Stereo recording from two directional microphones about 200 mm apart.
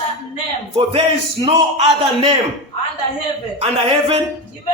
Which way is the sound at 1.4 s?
30° right (ahead or behind).